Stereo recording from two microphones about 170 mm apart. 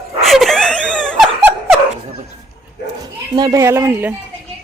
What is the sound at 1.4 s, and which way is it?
Music, 10° right (ahead or behind).